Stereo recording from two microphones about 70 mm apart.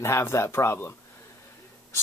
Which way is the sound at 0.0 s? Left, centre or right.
Left.